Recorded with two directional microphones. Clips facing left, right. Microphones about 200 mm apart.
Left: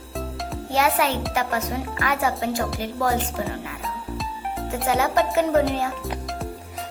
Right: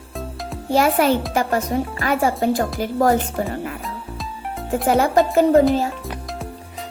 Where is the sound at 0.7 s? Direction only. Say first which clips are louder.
Right 5 dB; 45° right (ahead or behind).